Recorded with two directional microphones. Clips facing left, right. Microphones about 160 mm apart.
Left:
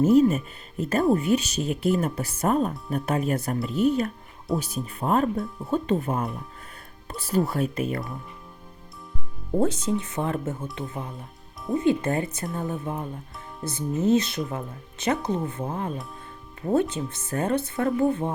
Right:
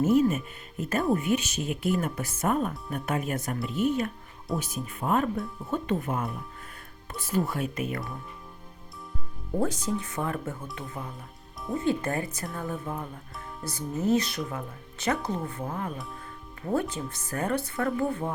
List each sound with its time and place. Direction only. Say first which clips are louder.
0.0 s speech: left 4 dB; 35° left (ahead or behind)
9.6 s speech: left 4 dB; 20° left (ahead or behind)
11.8 s speech: left 4 dB; 20° left (ahead or behind)